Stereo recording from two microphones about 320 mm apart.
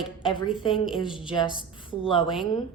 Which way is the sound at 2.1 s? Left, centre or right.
Centre.